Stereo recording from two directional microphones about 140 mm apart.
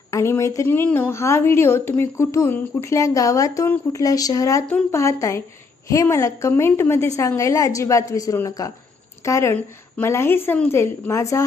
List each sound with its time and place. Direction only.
0.1 s a woman's voice: 20° left (ahead or behind)